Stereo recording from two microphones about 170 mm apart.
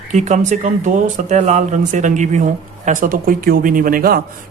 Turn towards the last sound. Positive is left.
turn(degrees=-60)  # may be behind; listen again after turning